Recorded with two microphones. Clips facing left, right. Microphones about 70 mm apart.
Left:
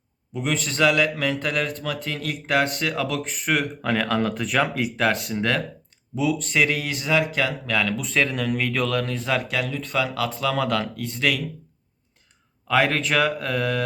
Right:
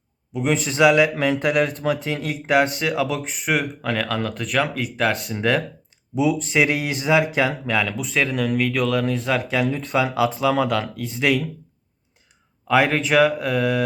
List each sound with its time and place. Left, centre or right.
0.5 s speech: centre
9.6 s speech: right
9.9 s speech: centre
10.2 s speech: centre
12.6 s speech: centre